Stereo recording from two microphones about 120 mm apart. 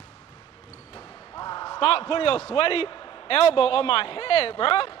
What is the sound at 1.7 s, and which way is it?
A man's voice, 50° left (ahead or behind).